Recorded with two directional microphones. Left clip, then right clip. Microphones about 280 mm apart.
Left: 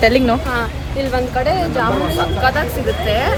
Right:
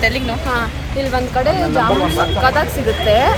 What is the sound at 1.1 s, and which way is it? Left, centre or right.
Speech, centre.